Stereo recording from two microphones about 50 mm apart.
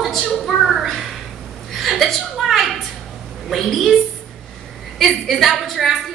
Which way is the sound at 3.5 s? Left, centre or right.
Centre.